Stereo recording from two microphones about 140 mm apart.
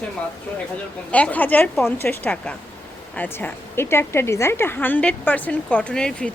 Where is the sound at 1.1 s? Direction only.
10° left (ahead or behind).